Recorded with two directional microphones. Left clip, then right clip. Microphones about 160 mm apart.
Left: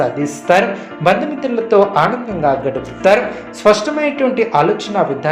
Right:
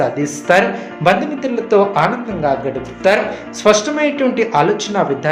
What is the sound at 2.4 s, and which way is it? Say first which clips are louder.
Speech: left 2 dB; 20° left (ahead or behind).